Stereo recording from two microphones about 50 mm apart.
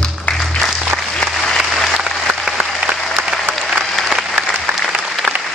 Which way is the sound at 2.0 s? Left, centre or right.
Centre.